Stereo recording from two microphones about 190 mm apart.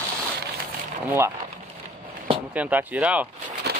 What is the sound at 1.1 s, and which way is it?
Speech, 15° right (ahead or behind).